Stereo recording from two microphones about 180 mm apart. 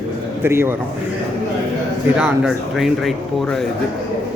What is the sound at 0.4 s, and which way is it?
Speech, 15° right (ahead or behind).